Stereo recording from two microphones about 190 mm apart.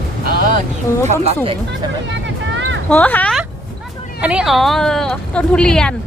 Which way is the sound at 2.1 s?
75° right (ahead or behind).